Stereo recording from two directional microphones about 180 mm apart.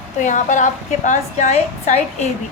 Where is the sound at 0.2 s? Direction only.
45° left (ahead or behind).